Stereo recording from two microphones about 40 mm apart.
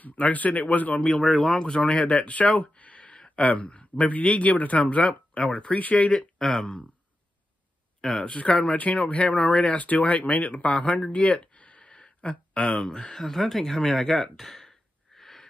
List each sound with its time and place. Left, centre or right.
0.0 s speech: left
1.2 s speech: centre
2.1 s speech: left
3.2 s a sound: left
4.1 s speech: left
6.1 s speech: centre
8.2 s speech: left
9.8 s speech: left
11.3 s a sound: left
12.6 s speech: centre
15.1 s a sound: centre